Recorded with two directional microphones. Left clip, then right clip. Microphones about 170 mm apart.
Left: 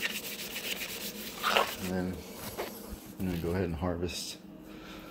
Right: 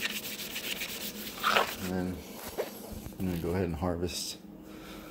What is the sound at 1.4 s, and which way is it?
Dog, 15° right (ahead or behind).